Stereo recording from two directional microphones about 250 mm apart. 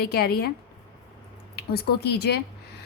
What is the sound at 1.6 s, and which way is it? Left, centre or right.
Speech, left.